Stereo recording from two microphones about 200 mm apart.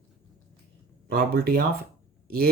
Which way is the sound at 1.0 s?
50° right (ahead or behind).